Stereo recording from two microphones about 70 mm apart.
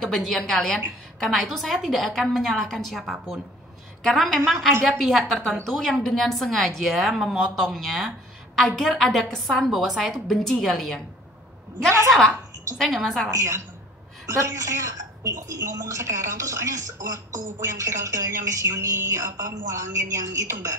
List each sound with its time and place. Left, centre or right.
0.0 s a woman's voice: centre
12.7 s a woman's voice: centre
13.3 s a woman's voice: right